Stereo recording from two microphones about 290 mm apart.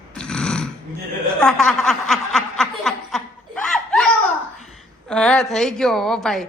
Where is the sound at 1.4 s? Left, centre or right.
Centre.